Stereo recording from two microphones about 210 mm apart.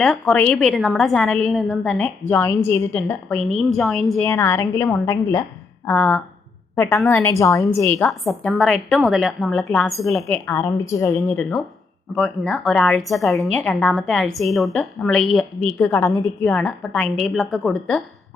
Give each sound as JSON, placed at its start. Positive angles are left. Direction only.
{"t": 0.0, "sound": "a woman's voice", "side_deg": 5}
{"t": 4.3, "sound": "a woman's voice", "side_deg": 15}